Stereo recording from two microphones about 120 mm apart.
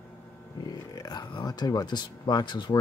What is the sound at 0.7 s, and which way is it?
Speech, 35° left (ahead or behind).